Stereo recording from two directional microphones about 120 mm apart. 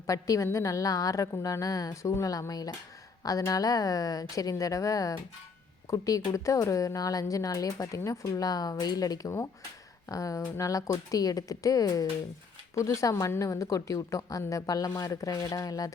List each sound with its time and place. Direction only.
0.1 s speech: 25° left (ahead or behind)